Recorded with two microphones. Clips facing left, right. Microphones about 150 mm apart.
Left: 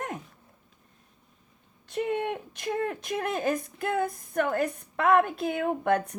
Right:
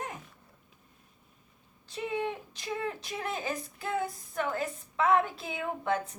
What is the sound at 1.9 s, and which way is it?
Speech, 60° left (ahead or behind).